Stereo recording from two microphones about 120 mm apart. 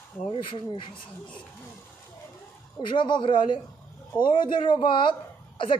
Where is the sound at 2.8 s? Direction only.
40° left (ahead or behind).